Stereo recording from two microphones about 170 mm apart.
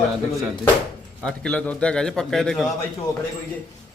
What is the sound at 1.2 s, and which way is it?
A man's voice, 5° left (ahead or behind).